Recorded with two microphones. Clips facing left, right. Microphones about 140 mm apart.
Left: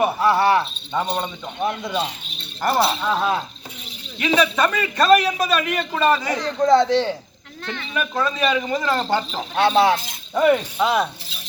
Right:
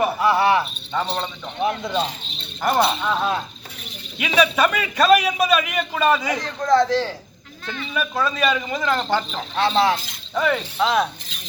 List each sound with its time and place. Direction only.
0.2 s a man's voice: centre (ahead or behind)
0.9 s mechanisms: 10° left (ahead or behind)
1.8 s a man's voice: centre (ahead or behind)
4.2 s a man's voice: 5° right (ahead or behind)
6.6 s speech: 25° left (ahead or behind)
7.6 s speech: 70° left (ahead or behind)
7.9 s a man's voice: centre (ahead or behind)
10.3 s mechanisms: 15° left (ahead or behind)